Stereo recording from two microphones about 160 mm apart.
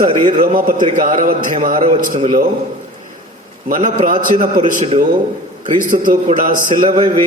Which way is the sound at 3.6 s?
55° right (ahead or behind).